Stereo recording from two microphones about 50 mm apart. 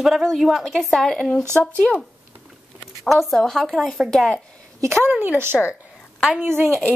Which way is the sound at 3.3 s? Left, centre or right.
Centre.